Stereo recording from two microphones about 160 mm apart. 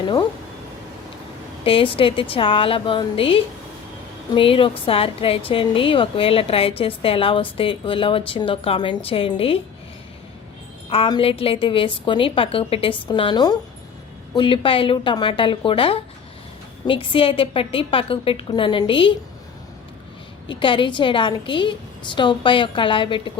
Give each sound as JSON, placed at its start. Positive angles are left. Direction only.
{"t": 1.6, "sound": "a woman's voice", "side_deg": 35}
{"t": 10.8, "sound": "a woman's voice", "side_deg": 35}
{"t": 20.5, "sound": "a woman's voice", "side_deg": 30}